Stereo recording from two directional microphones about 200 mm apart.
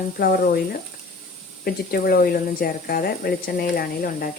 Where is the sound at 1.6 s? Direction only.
50° left (ahead or behind).